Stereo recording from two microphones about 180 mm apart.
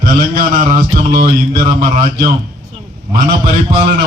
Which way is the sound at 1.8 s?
50° right (ahead or behind).